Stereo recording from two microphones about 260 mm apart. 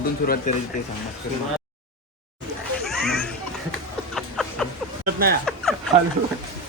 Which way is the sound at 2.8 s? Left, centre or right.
Centre.